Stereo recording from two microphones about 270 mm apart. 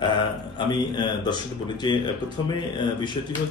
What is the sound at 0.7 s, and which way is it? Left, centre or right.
Speech, centre.